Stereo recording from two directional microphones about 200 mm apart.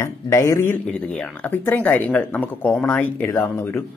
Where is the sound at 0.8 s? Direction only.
5° left (ahead or behind).